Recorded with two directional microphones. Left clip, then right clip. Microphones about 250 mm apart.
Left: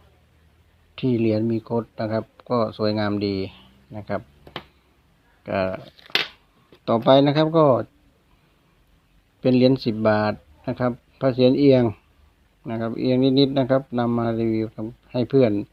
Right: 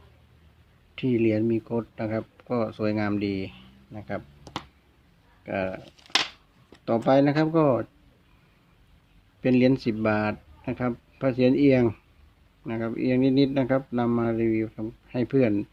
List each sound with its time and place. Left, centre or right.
0.9 s speech: centre
5.5 s speech: left
6.8 s speech: centre
9.4 s speech: centre